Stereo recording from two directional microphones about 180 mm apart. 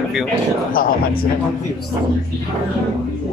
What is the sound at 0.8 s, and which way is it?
Speech, 50° left (ahead or behind).